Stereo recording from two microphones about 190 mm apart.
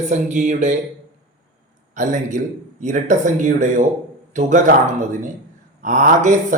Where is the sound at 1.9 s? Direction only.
40° right (ahead or behind).